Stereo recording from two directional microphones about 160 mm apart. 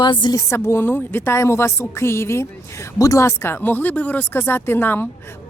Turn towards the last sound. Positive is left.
turn(degrees=10)  # may be behind; listen again after turning